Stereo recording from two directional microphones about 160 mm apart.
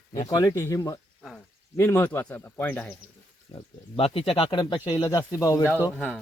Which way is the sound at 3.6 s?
35° left (ahead or behind).